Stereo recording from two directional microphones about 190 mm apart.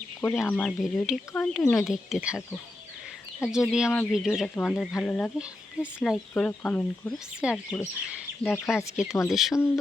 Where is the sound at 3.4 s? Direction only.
5° right (ahead or behind).